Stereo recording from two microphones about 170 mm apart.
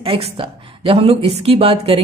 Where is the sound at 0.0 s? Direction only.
35° right (ahead or behind).